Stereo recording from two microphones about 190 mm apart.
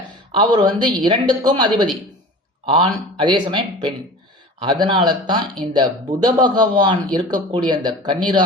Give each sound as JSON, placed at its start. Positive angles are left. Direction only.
{"t": 0.3, "sound": "speech", "side_deg": -25}